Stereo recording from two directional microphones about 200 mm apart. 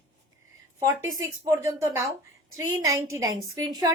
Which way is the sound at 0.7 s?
15° right (ahead or behind).